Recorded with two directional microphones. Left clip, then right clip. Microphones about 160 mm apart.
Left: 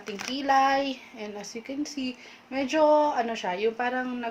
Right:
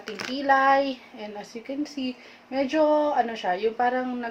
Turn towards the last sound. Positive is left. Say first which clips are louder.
# right 4 dB
turn(degrees=45)  # may be behind; listen again after turning